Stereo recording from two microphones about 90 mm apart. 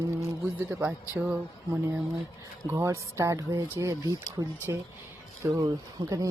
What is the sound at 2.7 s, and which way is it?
Speech, 35° right (ahead or behind).